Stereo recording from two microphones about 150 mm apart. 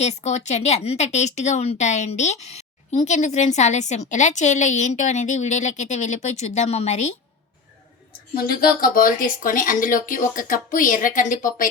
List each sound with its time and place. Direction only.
0.0 s speech: 50° left (ahead or behind)
8.4 s speech: 80° left